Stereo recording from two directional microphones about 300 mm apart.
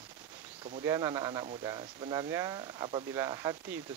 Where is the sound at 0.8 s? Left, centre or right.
Centre.